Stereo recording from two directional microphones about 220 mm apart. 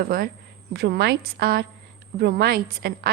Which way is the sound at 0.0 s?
40° right (ahead or behind).